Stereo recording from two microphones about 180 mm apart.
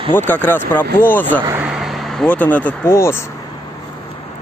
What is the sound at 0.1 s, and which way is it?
Speech, 10° left (ahead or behind).